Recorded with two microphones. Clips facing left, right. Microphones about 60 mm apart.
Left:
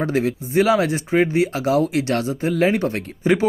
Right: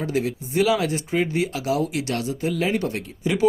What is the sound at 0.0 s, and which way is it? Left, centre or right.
Speech, left.